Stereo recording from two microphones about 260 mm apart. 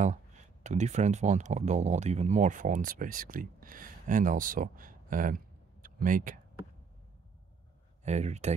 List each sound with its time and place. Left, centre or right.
0.7 s speech: right
8.0 s speech: right